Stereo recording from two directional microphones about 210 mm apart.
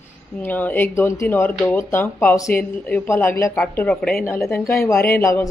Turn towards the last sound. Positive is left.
turn(degrees=10)  # may be behind; listen again after turning